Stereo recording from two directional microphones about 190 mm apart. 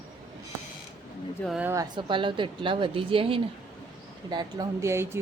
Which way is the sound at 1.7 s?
20° right (ahead or behind).